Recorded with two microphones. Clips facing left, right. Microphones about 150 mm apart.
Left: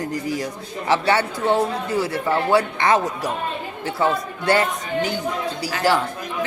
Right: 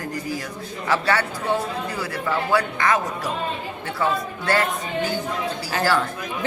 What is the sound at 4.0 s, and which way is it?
A woman's voice, 25° left (ahead or behind).